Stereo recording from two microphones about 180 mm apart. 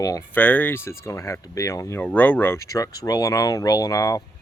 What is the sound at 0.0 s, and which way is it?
Speech, 15° left (ahead or behind).